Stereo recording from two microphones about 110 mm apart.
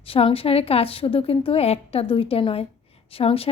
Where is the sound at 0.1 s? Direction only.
60° left (ahead or behind).